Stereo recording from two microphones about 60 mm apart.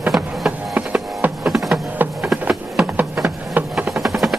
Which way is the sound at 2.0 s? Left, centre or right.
Right.